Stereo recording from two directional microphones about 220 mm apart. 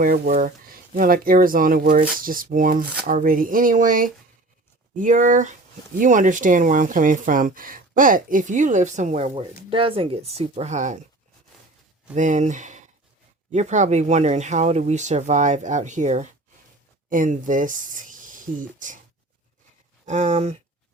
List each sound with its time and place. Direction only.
0.0 s speech: 40° right (ahead or behind)
12.1 s speech: 35° right (ahead or behind)
20.1 s speech: 30° right (ahead or behind)